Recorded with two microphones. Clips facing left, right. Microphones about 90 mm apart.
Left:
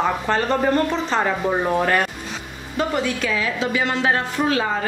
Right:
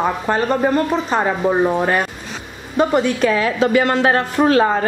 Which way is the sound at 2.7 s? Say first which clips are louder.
Right 6 dB; 40° right (ahead or behind).